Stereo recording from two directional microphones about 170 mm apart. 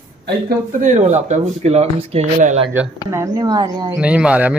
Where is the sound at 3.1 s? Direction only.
20° right (ahead or behind).